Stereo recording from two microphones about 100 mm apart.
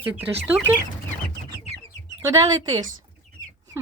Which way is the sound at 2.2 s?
40° right (ahead or behind).